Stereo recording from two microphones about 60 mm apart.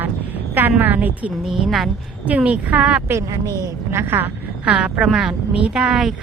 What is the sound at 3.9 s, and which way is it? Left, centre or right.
Speech, right.